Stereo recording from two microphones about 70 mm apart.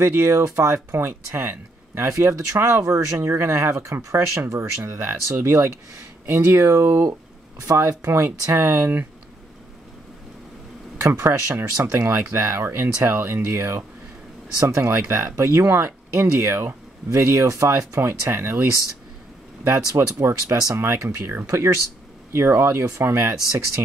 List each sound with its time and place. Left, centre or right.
0.0 s speech: right
7.7 s speech: right
8.0 s speech: right
11.1 s speech: right
19.6 s speech: right
20.2 s speech: right
20.9 s speech: right